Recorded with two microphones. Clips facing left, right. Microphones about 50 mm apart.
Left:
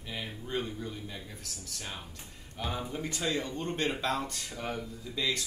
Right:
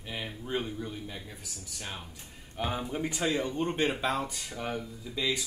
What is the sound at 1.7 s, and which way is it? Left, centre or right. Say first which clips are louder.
Speech: right 1 dB; centre.